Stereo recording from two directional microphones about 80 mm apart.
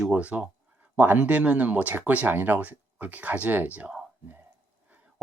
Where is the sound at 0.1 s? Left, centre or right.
Centre.